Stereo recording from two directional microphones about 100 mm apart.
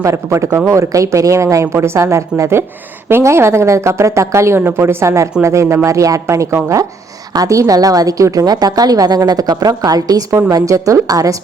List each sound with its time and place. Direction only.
0.0 s a woman's voice: 30° right (ahead or behind)